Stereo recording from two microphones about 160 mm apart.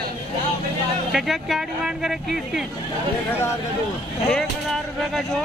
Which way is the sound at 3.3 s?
15° left (ahead or behind).